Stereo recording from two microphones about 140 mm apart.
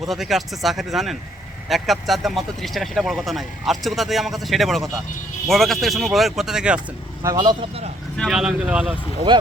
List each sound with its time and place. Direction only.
0.1 s speech: centre (ahead or behind)
6.7 s speech: 25° right (ahead or behind)
8.3 s speech: 5° right (ahead or behind)